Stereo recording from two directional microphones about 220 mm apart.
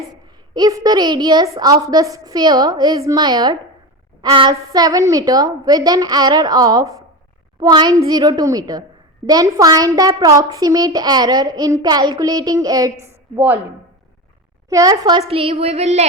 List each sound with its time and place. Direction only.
0.5 s a child's voice: 15° right (ahead or behind)
14.7 s a child's voice: 15° right (ahead or behind)
15.3 s child singing: 25° right (ahead or behind)